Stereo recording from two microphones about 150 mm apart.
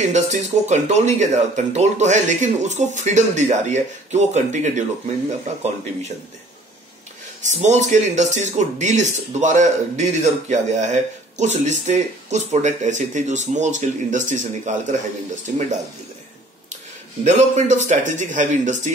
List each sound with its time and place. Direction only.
0.0 s speech: 50° right (ahead or behind)
7.4 s speech: 50° right (ahead or behind)
17.2 s speech: 50° right (ahead or behind)